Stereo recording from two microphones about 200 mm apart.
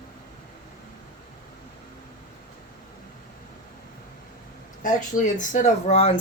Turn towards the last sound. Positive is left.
turn(degrees=30)  # may be behind; listen again after turning